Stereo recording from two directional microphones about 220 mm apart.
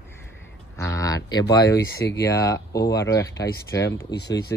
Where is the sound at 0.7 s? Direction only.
15° left (ahead or behind).